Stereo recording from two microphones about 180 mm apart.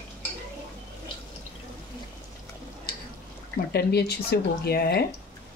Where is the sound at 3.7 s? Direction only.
65° left (ahead or behind).